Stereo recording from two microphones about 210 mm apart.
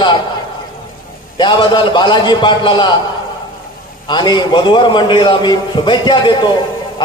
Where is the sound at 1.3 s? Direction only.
20° left (ahead or behind).